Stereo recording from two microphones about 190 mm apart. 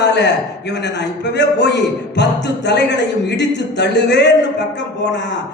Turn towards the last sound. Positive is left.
turn(degrees=65)  # may be behind; listen again after turning